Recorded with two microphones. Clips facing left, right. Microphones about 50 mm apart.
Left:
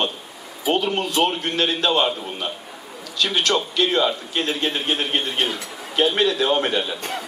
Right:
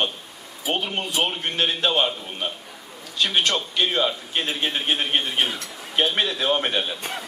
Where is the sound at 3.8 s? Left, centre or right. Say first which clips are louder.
Left 3 dB; centre.